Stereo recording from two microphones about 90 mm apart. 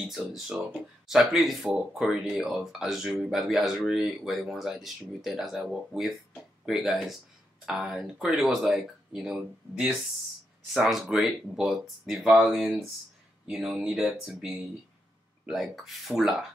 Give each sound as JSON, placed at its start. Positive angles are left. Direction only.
{"t": 0.0, "sound": "speech", "side_deg": -5}
{"t": 15.4, "sound": "speech", "side_deg": 0}